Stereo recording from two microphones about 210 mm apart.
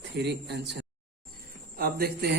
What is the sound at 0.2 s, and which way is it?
A man's voice, 55° right (ahead or behind).